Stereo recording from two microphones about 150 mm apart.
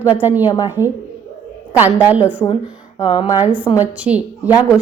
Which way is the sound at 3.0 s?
30° left (ahead or behind).